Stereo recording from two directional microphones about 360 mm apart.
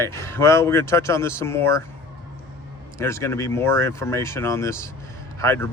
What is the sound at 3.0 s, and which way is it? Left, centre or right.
Speech, centre.